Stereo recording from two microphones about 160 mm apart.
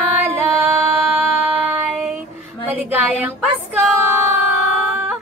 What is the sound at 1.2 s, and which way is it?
Music, 10° right (ahead or behind).